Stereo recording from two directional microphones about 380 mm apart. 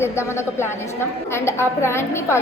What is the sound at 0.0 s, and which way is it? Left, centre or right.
A woman's voice, centre.